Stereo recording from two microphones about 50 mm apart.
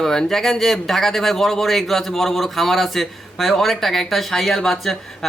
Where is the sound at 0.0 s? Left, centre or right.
Centre.